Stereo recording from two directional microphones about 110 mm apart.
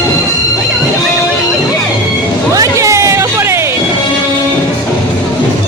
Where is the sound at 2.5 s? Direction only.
30° right (ahead or behind).